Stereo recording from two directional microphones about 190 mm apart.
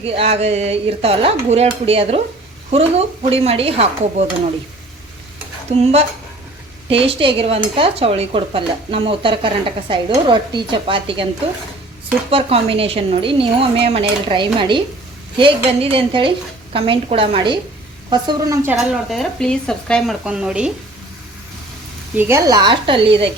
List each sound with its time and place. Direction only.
0.0 s speech: 30° right (ahead or behind)
5.8 s speech: 35° right (ahead or behind)
12.3 s a woman's voice: 30° right (ahead or behind); by 18.8 s 15° right (ahead or behind)
18.8 s speech: centre (ahead or behind)
22.1 s speech: 10° right (ahead or behind); by 23.3 s 30° right (ahead or behind)